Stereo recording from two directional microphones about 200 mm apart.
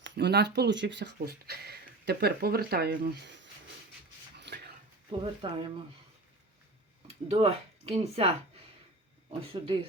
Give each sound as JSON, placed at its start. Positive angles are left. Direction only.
{"t": 0.0, "sound": "speech", "side_deg": -60}
{"t": 4.4, "sound": "a sound", "side_deg": -60}
{"t": 5.2, "sound": "speech", "side_deg": -25}
{"t": 7.3, "sound": "speech", "side_deg": -30}
{"t": 9.4, "sound": "speech", "side_deg": -25}